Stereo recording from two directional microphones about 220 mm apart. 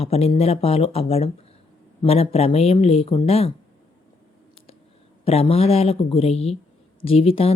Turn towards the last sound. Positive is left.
turn(degrees=25)  # may be behind; listen again after turning